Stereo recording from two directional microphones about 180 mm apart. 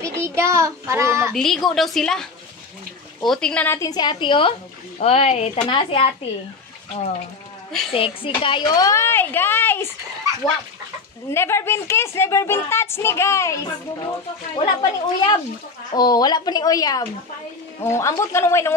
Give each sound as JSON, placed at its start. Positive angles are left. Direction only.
{"t": 0.0, "sound": "child singing", "side_deg": -15}
{"t": 1.3, "sound": "a woman's voice", "side_deg": 0}
{"t": 3.3, "sound": "speech", "side_deg": 5}
{"t": 7.9, "sound": "a woman's voice", "side_deg": 30}
{"t": 11.2, "sound": "a woman's voice", "side_deg": 15}